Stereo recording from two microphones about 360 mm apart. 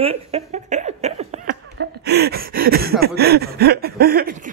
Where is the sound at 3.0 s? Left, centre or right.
Right.